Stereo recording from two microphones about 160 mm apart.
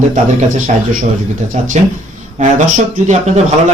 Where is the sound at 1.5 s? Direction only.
45° right (ahead or behind).